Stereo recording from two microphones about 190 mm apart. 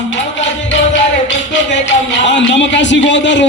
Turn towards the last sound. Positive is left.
turn(degrees=70)  # may be behind; listen again after turning